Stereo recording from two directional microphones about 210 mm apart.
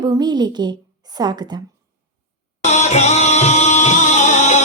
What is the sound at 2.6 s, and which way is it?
Music, 30° left (ahead or behind).